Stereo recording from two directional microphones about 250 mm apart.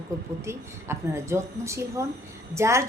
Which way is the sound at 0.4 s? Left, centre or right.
Centre.